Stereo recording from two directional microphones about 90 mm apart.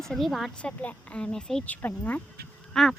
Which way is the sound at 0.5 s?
15° left (ahead or behind).